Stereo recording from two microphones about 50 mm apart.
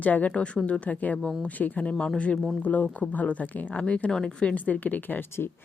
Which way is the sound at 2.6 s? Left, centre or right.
Left.